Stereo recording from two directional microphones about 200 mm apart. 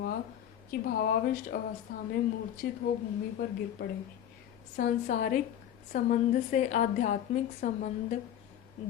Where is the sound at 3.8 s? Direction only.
55° left (ahead or behind).